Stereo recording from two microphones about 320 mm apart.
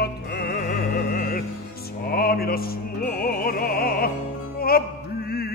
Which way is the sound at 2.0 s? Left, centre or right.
Left.